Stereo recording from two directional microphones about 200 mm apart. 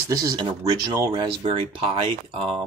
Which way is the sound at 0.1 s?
20° right (ahead or behind).